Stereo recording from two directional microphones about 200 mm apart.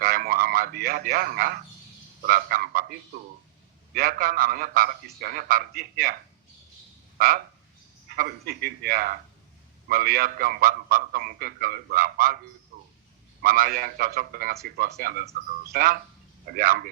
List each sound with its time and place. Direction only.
0.0 s a sound: 45° right (ahead or behind)
3.9 s a man's voice: 45° right (ahead or behind)
8.1 s a man's voice: 50° right (ahead or behind)
13.4 s a man's voice: 45° right (ahead or behind)